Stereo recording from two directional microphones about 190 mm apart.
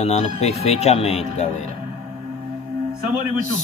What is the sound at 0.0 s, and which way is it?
Speech, 35° left (ahead or behind).